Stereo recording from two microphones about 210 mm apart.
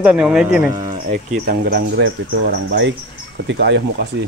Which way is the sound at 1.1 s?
45° right (ahead or behind).